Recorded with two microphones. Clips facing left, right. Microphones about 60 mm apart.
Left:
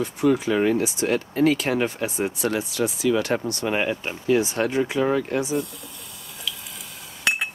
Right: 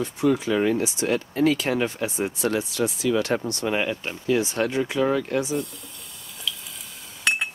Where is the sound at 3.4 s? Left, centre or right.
Left.